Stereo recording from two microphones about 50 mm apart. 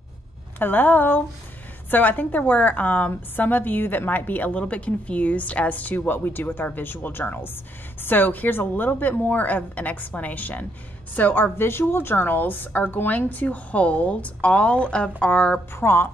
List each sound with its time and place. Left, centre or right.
0.6 s a woman's voice: left
15.7 s speech: left